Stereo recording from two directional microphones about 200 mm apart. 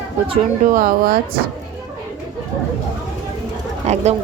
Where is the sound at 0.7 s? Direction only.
45° right (ahead or behind).